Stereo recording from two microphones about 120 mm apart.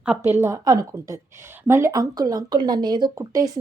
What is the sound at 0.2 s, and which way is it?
A woman's voice, 20° right (ahead or behind).